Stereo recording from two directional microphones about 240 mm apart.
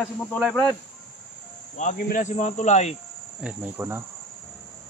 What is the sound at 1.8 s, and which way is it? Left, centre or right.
Speech, left.